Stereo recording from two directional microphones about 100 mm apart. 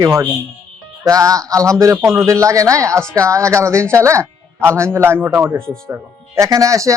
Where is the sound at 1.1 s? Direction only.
35° right (ahead or behind).